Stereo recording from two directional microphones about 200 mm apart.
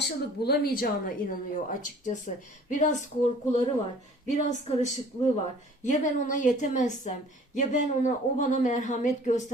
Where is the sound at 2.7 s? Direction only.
40° left (ahead or behind).